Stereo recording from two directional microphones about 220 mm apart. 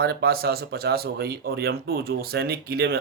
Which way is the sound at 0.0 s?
45° right (ahead or behind).